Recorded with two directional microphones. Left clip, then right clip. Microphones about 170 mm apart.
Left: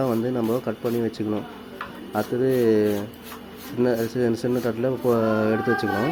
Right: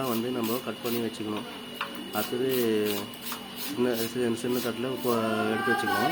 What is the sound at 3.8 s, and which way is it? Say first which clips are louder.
Speech: left 6 dB; 25° left (ahead or behind).